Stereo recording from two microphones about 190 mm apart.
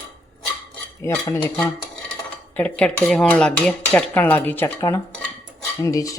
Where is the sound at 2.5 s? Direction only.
5° left (ahead or behind).